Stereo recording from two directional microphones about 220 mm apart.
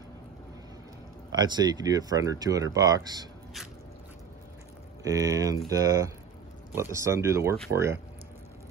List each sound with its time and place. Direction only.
1.3 s speech: 20° right (ahead or behind)
5.0 s speech: 15° right (ahead or behind)